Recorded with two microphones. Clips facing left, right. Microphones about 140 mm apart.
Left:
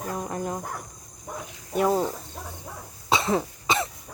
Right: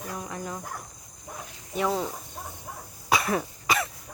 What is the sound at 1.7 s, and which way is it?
Speech, 45° left (ahead or behind).